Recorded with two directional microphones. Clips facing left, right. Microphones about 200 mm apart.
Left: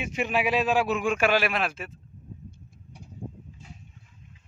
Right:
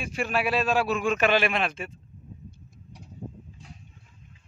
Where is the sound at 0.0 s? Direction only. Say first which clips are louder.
Left 1 dB; 20° left (ahead or behind); by 1.9 s 5° left (ahead or behind).